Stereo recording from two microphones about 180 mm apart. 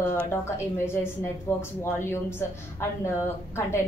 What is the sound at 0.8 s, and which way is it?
A woman's voice, 15° left (ahead or behind).